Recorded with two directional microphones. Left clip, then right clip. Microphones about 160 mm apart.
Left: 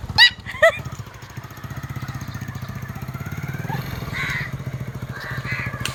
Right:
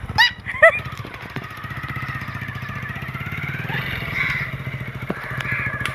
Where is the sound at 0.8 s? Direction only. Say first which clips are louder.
Right 6 dB; 55° left (ahead or behind).